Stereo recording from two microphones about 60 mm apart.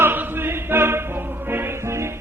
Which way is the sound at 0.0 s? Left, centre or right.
Right.